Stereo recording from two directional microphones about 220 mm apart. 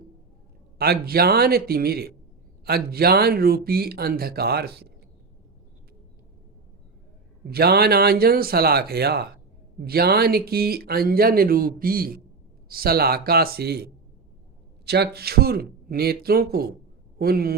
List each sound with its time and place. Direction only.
0.8 s speech: 45° right (ahead or behind)
7.5 s speech: 45° right (ahead or behind)